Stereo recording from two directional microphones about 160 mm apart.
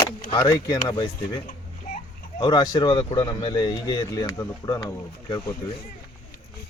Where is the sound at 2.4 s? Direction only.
25° left (ahead or behind).